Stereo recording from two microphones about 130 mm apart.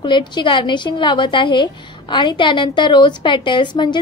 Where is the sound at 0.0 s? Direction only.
35° left (ahead or behind).